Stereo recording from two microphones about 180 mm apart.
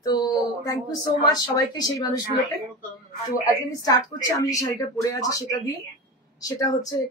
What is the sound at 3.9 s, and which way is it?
A woman's voice, 20° left (ahead or behind).